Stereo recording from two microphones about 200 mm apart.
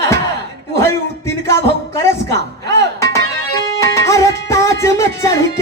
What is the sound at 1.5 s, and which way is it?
Music, 15° left (ahead or behind).